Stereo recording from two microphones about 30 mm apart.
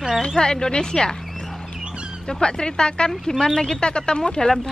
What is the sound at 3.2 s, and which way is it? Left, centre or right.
Speech, centre.